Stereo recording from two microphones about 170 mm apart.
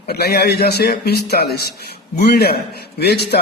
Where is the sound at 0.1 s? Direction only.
70° left (ahead or behind).